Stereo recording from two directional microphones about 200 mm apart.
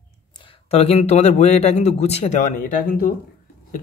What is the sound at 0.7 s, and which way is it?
Speech, 30° left (ahead or behind).